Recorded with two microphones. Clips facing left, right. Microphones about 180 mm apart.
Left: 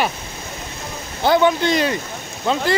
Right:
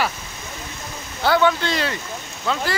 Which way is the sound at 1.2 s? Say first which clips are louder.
Left 3 dB; 20° left (ahead or behind).